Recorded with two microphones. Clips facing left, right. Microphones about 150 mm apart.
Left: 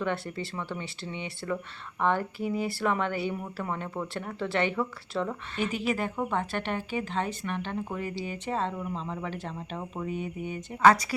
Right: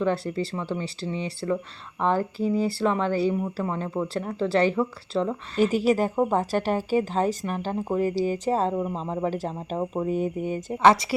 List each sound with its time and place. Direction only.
0.0 s a woman's voice: 30° right (ahead or behind)
10.8 s a woman's voice: 25° right (ahead or behind)